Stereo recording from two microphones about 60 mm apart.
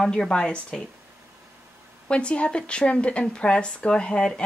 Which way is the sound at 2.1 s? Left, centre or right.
Centre.